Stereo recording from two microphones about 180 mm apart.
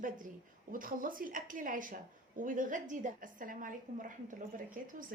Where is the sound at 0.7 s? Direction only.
50° right (ahead or behind).